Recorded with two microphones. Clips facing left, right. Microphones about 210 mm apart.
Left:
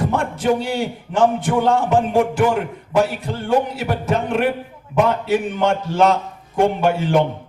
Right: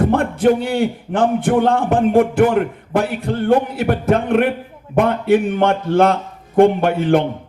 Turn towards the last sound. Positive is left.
turn(degrees=-55)  # may be behind; listen again after turning